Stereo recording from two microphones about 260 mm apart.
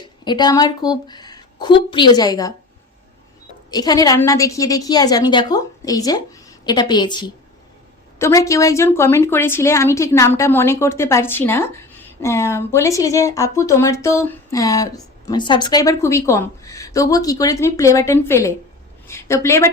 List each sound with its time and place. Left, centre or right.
0.0 s speech: centre
3.7 s a woman's voice: centre